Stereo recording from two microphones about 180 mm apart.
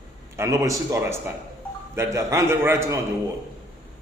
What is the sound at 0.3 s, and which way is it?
A man's voice, 20° right (ahead or behind).